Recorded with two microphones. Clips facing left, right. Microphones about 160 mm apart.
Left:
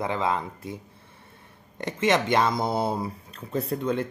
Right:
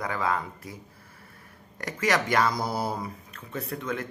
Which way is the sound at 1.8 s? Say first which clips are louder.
Left 3 dB; 25° left (ahead or behind).